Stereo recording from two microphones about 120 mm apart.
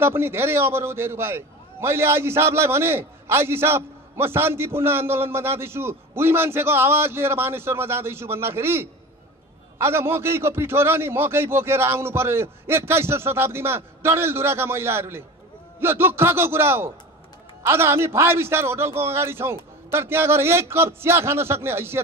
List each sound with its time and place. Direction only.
0.0 s a man's voice: 20° right (ahead or behind)